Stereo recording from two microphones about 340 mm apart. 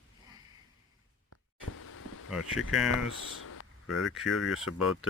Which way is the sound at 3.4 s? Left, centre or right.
Left.